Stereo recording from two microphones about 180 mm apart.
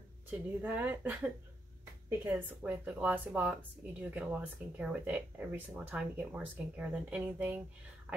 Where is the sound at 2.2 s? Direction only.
10° right (ahead or behind).